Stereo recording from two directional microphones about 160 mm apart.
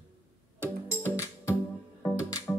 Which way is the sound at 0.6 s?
15° left (ahead or behind).